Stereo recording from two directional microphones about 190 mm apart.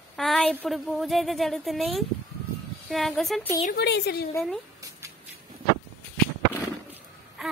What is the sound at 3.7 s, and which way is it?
Speech, 60° left (ahead or behind).